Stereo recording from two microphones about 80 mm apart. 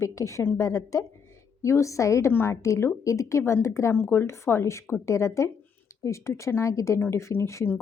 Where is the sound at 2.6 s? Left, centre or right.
Left.